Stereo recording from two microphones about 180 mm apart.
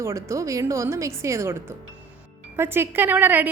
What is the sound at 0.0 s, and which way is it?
A woman's voice, 15° right (ahead or behind).